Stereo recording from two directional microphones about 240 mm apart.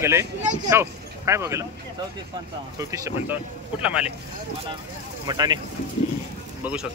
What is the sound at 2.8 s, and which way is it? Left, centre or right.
Speech, centre.